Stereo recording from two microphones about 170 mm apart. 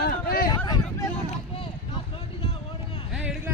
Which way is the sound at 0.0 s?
60° left (ahead or behind).